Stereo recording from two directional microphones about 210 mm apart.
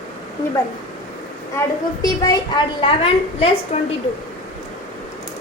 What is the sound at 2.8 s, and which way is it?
A woman's voice, 25° left (ahead or behind).